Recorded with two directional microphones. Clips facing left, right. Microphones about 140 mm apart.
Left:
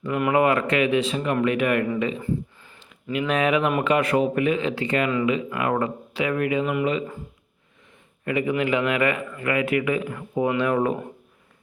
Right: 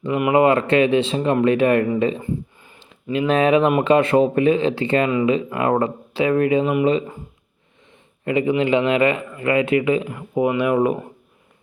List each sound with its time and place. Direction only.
0.0 s a man's voice: 20° right (ahead or behind)
8.2 s a man's voice: 25° right (ahead or behind)